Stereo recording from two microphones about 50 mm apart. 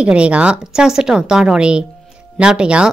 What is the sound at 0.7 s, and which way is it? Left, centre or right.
A woman's voice, centre.